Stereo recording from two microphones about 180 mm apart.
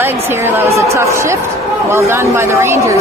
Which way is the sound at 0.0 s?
10° right (ahead or behind).